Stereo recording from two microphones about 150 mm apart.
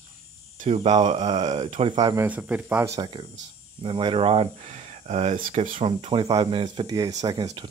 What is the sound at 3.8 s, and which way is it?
Speech, 35° right (ahead or behind).